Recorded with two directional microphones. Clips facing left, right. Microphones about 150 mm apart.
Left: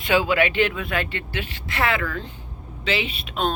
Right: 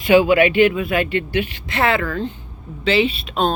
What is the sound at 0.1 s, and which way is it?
Speech, 15° right (ahead or behind).